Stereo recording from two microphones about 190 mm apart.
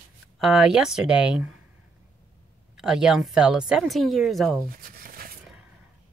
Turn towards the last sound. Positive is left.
turn(degrees=-50)  # may be behind; listen again after turning